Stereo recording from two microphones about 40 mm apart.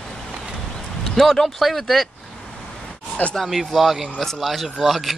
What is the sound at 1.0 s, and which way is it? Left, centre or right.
Speech, centre.